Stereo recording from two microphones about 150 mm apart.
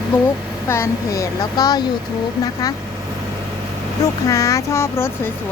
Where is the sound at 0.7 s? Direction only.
20° left (ahead or behind).